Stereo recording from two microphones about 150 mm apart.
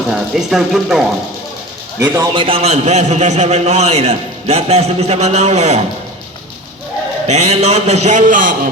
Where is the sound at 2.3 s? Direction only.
40° right (ahead or behind).